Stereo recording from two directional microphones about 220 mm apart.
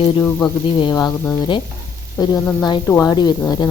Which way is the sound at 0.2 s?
10° left (ahead or behind).